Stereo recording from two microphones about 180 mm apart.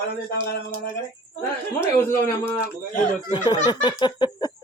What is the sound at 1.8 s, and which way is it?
Speech, 15° left (ahead or behind).